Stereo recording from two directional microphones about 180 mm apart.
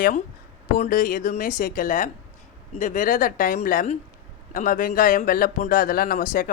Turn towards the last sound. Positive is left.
turn(degrees=50)  # may be behind; listen again after turning